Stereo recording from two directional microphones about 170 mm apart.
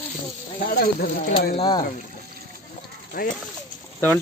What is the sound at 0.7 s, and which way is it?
Speech, 55° left (ahead or behind).